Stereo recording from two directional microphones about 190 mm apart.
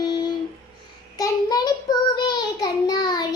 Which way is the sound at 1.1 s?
20° left (ahead or behind).